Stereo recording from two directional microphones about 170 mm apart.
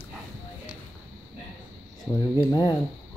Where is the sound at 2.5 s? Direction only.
20° left (ahead or behind).